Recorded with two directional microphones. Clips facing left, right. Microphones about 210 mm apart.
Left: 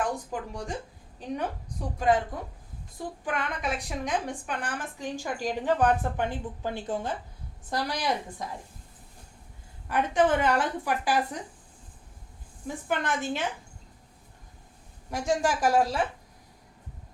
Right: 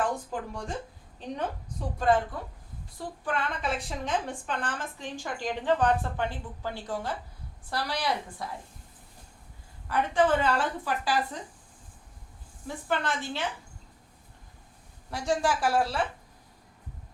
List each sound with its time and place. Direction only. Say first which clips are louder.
0.0 s a sound: even; 15° left (ahead or behind)
2.0 s a woman's voice: even; 15° left (ahead or behind)
3.2 s a woman's voice: right 1 dB; 15° left (ahead or behind)
9.9 s a woman's voice: left 1 dB; 15° left (ahead or behind)
12.6 s a woman's voice: left 1 dB; 15° left (ahead or behind)
15.1 s a woman's voice: left 1 dB; 10° left (ahead or behind)